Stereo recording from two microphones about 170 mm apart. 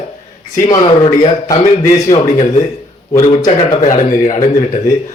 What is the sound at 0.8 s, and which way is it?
Speech, 35° left (ahead or behind).